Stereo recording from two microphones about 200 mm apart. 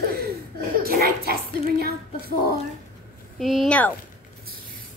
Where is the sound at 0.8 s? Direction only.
45° right (ahead or behind).